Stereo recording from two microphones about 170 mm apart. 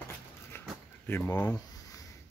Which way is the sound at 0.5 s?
15° left (ahead or behind).